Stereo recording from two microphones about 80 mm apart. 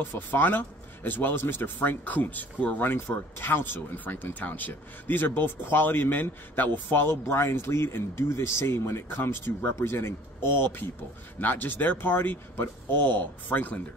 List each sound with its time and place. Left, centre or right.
0.0 s speech: left